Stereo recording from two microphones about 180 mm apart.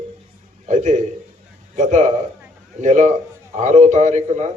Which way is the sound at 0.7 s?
40° right (ahead or behind).